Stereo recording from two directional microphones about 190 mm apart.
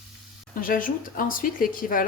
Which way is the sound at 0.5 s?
45° left (ahead or behind).